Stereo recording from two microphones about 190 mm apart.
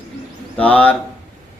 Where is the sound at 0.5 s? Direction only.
5° left (ahead or behind).